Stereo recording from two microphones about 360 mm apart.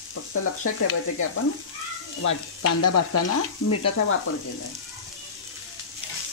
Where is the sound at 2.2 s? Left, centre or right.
Left.